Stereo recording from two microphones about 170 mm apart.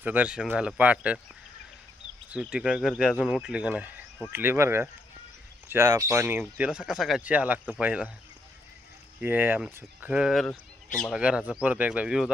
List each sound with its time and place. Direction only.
0.0 s speech: 10° right (ahead or behind)
2.3 s speech: 5° right (ahead or behind)
9.2 s speech: 10° right (ahead or behind); by 11.2 s 5° left (ahead or behind)
11.2 s speech: 5° right (ahead or behind)